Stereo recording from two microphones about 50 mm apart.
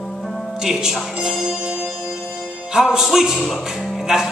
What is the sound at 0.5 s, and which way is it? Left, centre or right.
Speech, centre.